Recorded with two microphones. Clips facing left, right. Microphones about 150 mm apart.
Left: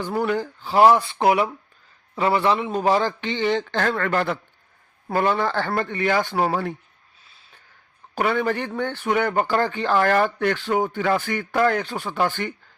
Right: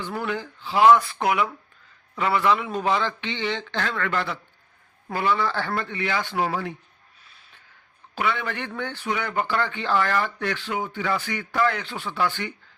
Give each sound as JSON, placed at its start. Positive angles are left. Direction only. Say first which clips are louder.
{"t": 0.1, "sound": "speech", "louder": "left 7 dB", "side_deg": 40}
{"t": 8.1, "sound": "speech", "louder": "left 5 dB", "side_deg": 45}
{"t": 8.9, "sound": "speech", "louder": "left 9 dB", "side_deg": 50}